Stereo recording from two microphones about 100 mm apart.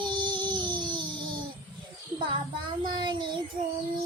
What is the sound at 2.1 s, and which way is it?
Child singing, 50° right (ahead or behind).